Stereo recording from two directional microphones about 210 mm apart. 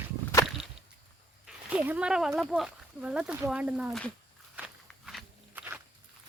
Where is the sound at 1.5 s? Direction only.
5° right (ahead or behind).